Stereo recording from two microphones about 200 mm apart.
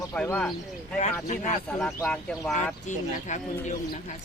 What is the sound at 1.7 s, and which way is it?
Speech, centre (ahead or behind).